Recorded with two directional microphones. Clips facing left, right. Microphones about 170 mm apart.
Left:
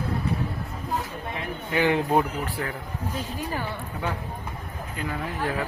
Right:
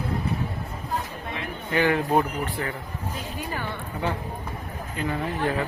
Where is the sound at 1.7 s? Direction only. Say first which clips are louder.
Even; 15° left (ahead or behind).